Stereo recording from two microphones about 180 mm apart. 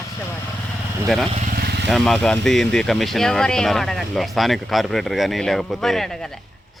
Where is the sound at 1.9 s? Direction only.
Centre (ahead or behind).